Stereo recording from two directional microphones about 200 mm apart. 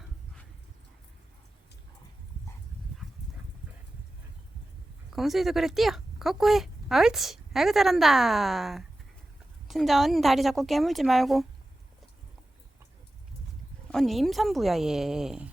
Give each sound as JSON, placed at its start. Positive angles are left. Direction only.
{"t": 5.1, "sound": "speech", "side_deg": 0}
{"t": 13.9, "sound": "speech", "side_deg": 0}